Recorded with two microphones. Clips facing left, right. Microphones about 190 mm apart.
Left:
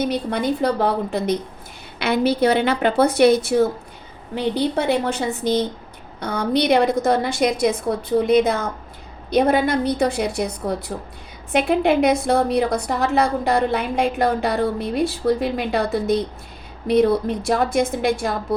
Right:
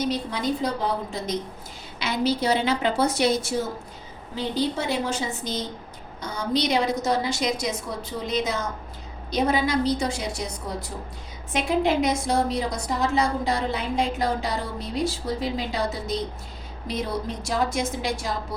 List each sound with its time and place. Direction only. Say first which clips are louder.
0.0 s a woman's voice: left 5 dB; 60° left (ahead or behind)